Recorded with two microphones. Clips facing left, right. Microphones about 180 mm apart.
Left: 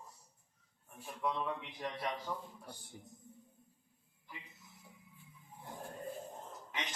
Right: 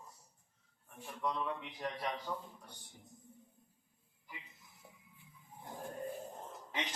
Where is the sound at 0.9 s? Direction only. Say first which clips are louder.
Left 1 dB; 5° left (ahead or behind).